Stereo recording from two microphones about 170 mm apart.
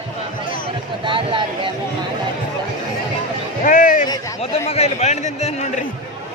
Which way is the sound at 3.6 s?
50° left (ahead or behind).